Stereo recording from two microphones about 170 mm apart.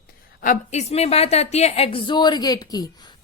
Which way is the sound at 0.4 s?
45° left (ahead or behind).